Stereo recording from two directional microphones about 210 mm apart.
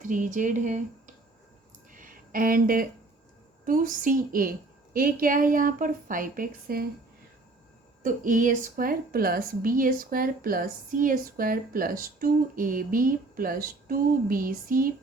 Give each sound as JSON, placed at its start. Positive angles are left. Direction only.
{"t": 0.0, "sound": "speech", "side_deg": -35}
{"t": 1.9, "sound": "a sound", "side_deg": -40}
{"t": 3.7, "sound": "a woman's voice", "side_deg": -40}
{"t": 8.0, "sound": "a woman's voice", "side_deg": -40}